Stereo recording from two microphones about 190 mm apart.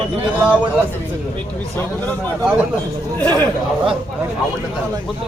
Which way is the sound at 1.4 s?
10° left (ahead or behind).